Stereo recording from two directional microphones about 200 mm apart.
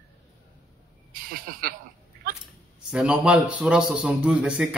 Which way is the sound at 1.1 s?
45° right (ahead or behind).